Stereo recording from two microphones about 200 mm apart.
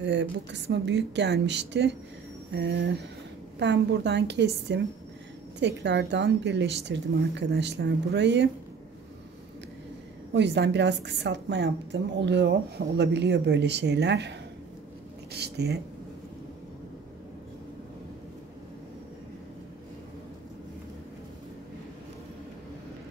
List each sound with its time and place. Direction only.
0.0 s a woman's voice: 60° right (ahead or behind)
10.3 s a woman's voice: 60° right (ahead or behind)
15.3 s speech: 55° right (ahead or behind)